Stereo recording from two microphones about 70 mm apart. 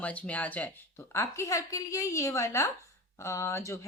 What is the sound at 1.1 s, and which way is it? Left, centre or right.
A woman's voice, left.